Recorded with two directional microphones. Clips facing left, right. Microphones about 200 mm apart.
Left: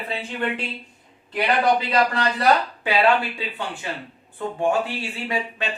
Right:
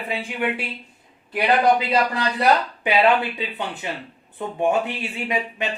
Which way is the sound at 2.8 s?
20° right (ahead or behind).